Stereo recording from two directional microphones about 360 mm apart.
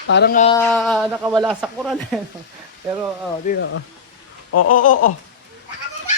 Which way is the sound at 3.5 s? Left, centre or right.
Left.